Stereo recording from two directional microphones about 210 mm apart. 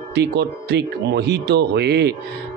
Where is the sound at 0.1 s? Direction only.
50° right (ahead or behind).